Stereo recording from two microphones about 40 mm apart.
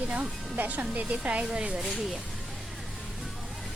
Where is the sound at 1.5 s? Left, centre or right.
Right.